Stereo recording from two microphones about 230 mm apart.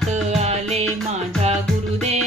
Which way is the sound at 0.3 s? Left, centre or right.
Right.